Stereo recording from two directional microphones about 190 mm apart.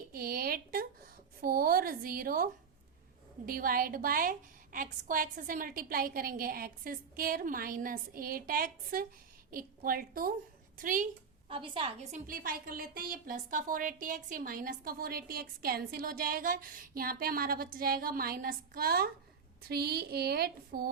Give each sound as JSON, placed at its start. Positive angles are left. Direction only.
{"t": 0.1, "sound": "a sound", "side_deg": -50}
{"t": 1.4, "sound": "a woman's voice", "side_deg": -50}
{"t": 11.4, "sound": "a woman's voice", "side_deg": -25}
{"t": 12.1, "sound": "a woman's voice", "side_deg": -50}